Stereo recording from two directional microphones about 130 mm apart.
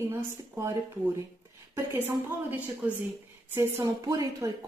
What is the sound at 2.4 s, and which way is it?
Speech, 10° right (ahead or behind).